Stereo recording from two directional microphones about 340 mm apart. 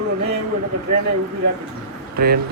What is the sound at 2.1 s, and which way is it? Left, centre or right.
Speech, right.